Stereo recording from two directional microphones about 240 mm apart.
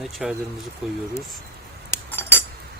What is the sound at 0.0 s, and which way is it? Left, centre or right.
Speech, centre.